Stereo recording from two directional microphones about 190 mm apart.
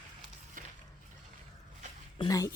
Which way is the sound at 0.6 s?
45° right (ahead or behind).